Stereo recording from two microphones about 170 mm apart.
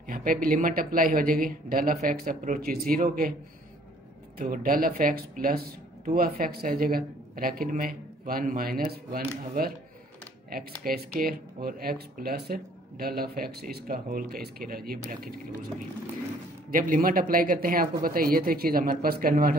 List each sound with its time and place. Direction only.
0.1 s speech: 55° right (ahead or behind)
4.4 s speech: 55° right (ahead or behind)
10.8 s speech: 60° right (ahead or behind)
16.7 s speech: 55° right (ahead or behind)